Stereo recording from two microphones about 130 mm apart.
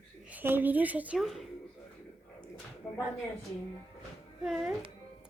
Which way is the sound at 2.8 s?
5° left (ahead or behind).